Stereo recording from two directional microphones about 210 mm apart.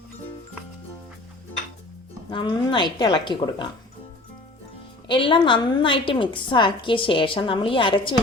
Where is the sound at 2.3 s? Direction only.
20° left (ahead or behind).